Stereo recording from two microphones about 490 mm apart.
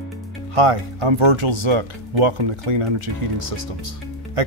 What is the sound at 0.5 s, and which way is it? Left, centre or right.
Speech, right.